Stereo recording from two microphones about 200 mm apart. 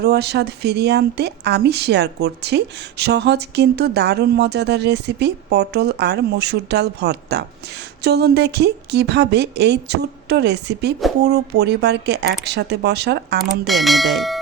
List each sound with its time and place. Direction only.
0.0 s speech: 55° right (ahead or behind)
13.7 s speech: centre (ahead or behind)